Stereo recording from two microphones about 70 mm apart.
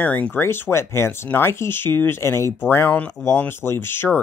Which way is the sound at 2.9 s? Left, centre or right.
Centre.